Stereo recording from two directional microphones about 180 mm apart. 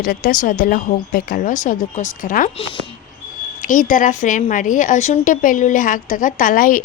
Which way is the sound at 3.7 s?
45° left (ahead or behind).